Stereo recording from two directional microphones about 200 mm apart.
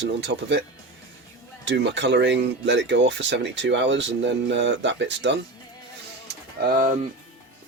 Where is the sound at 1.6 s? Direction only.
60° right (ahead or behind).